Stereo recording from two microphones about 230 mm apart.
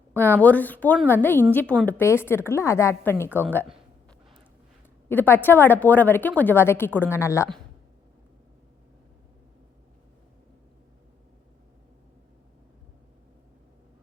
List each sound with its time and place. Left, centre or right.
0.2 s a woman's voice: centre
5.0 s a woman's voice: centre